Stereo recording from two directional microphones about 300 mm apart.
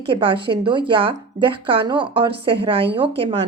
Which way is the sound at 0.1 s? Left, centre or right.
Centre.